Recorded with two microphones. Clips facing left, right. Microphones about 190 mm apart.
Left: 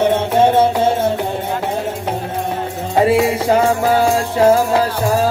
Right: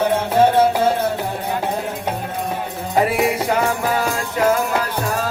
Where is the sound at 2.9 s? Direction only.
25° left (ahead or behind).